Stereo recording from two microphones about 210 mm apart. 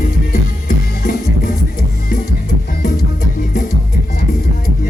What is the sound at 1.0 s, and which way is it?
Music, 45° left (ahead or behind).